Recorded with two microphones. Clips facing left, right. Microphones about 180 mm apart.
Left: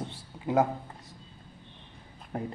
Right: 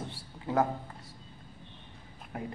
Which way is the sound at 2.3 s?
35° left (ahead or behind).